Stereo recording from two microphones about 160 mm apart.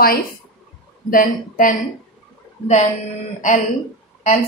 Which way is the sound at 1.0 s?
60° left (ahead or behind).